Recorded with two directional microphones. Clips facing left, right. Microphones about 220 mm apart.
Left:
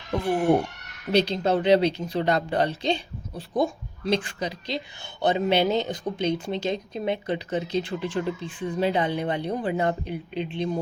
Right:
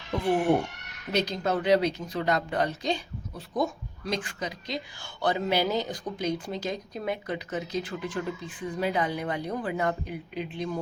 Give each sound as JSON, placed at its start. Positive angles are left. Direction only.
{"t": 1.1, "sound": "a woman's voice", "side_deg": 30}